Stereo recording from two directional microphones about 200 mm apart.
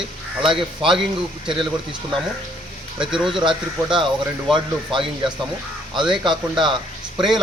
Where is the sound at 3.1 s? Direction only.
Centre (ahead or behind).